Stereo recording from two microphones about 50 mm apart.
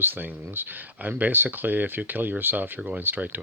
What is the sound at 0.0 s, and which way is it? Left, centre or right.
Speech, right.